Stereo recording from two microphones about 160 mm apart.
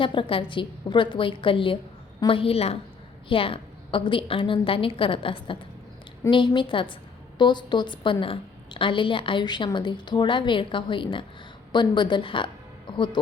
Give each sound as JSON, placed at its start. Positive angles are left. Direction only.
{"t": 0.0, "sound": "a woman's voice", "side_deg": 30}
{"t": 12.9, "sound": "music", "side_deg": 30}